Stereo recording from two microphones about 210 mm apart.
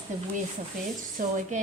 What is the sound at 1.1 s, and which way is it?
Speech, 35° right (ahead or behind).